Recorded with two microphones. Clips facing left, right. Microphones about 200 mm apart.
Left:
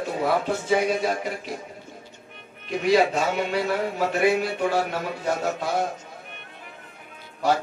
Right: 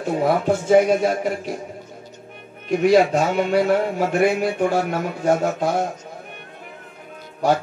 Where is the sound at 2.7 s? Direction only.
50° right (ahead or behind).